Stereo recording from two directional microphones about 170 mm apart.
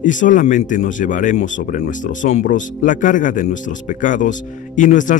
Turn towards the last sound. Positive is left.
turn(degrees=50)  # may be behind; listen again after turning